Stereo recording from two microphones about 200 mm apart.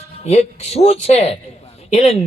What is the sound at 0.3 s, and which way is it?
A man's voice, 35° left (ahead or behind).